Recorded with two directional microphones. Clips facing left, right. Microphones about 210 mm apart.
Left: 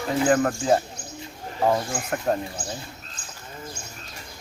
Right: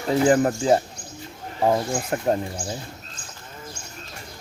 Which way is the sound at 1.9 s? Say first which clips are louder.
Right 3 dB; 25° right (ahead or behind).